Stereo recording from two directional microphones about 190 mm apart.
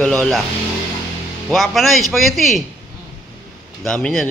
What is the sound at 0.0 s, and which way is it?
Speech, 5° left (ahead or behind).